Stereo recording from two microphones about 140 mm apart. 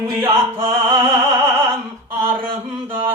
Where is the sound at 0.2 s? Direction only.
20° right (ahead or behind).